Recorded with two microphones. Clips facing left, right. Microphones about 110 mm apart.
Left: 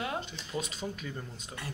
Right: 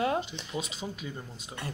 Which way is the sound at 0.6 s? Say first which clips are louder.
Even; 5° right (ahead or behind).